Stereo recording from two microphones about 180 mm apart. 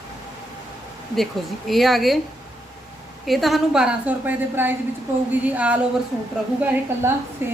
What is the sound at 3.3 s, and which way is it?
A woman's voice, centre (ahead or behind).